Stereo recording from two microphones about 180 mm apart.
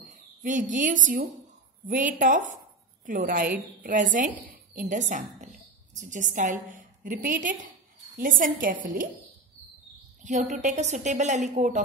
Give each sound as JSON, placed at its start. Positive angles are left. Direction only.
{"t": 0.1, "sound": "a woman's voice", "side_deg": -45}
{"t": 10.2, "sound": "a woman's voice", "side_deg": -45}